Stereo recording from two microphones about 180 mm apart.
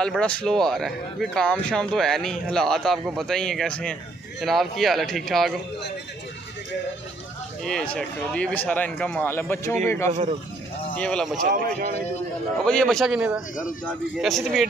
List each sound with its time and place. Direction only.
0.0 s speech: 5° left (ahead or behind)
7.6 s speech: 5° left (ahead or behind)
11.4 s speech: 50° right (ahead or behind)
12.6 s speech: 5° left (ahead or behind)